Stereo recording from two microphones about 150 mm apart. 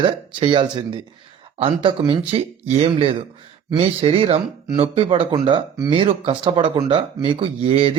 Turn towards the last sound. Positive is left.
turn(degrees=-40)  # may be behind; listen again after turning